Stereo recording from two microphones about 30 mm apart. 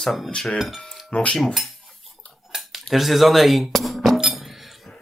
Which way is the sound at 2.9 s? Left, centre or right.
Centre.